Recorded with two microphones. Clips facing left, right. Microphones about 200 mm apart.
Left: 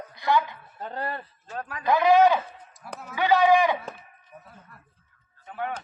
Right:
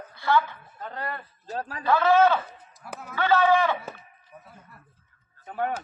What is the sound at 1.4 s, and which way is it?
Speech, 30° right (ahead or behind).